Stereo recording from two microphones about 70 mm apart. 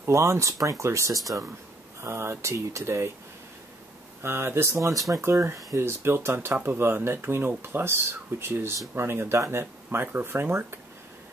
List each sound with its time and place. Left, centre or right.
0.0 s speech: right
2.0 s speech: right
4.2 s speech: right